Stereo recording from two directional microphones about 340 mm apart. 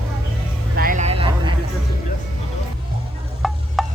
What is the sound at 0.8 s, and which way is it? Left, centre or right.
Vehicle, right.